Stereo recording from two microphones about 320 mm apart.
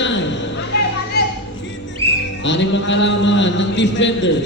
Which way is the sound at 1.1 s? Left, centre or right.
Left.